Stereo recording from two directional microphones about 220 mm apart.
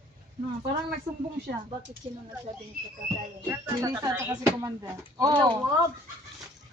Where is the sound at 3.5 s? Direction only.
15° right (ahead or behind).